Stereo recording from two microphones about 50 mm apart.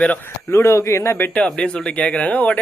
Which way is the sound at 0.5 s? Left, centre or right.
Left.